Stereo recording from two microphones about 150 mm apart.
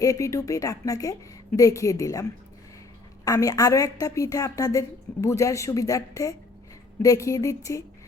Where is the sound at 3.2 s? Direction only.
25° left (ahead or behind).